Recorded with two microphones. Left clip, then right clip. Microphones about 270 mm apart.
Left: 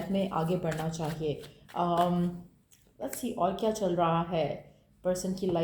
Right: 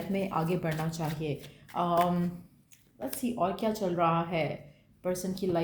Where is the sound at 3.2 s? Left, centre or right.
Right.